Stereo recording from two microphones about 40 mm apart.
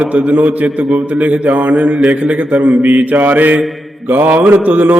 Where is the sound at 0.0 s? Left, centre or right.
Right.